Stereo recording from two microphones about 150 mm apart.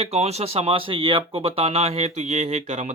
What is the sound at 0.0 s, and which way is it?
Speech, 45° right (ahead or behind).